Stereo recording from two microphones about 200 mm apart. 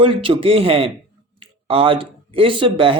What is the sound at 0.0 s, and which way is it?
Speech, 25° right (ahead or behind).